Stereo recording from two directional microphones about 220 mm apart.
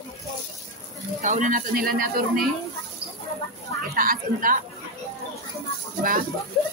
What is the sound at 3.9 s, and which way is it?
Speech, 40° right (ahead or behind).